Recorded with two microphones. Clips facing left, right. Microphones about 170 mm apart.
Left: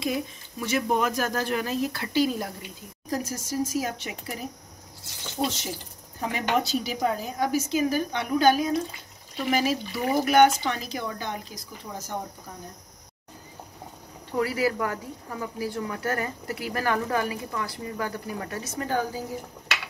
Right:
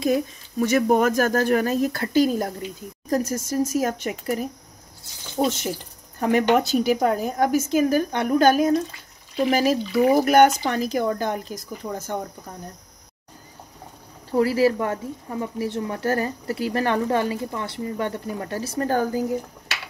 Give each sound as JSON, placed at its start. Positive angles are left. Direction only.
{"t": 0.0, "sound": "a woman's voice", "side_deg": -45}
{"t": 14.3, "sound": "speech", "side_deg": -30}